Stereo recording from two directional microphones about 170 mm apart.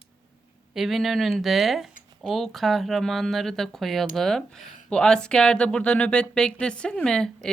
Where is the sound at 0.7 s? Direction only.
Centre (ahead or behind).